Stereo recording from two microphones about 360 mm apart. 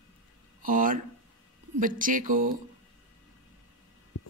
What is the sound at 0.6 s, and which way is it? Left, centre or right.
A woman's voice, right.